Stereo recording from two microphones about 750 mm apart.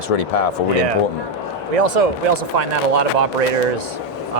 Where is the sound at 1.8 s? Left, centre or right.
Right.